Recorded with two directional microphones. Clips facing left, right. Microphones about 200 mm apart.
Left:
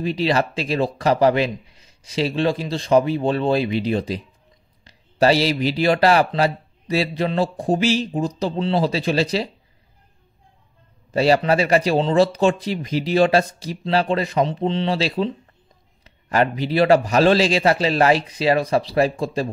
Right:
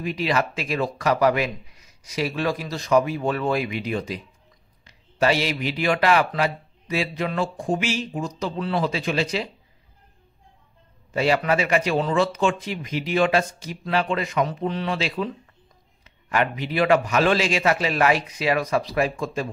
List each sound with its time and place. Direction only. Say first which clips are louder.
0.0 s speech: left 4 dB; 30° left (ahead or behind)
11.1 s speech: left 4 dB; 35° left (ahead or behind)